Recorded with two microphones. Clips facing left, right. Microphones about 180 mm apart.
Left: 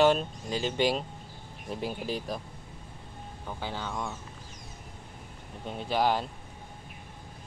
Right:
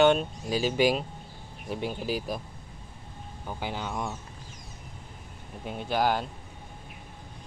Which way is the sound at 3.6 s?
15° right (ahead or behind).